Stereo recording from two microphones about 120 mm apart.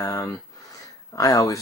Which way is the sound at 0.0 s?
25° left (ahead or behind).